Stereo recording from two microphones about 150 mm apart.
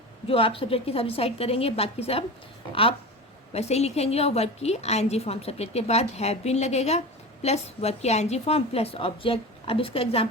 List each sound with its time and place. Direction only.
0.3 s a woman's voice: 35° left (ahead or behind)
3.5 s a woman's voice: 45° left (ahead or behind)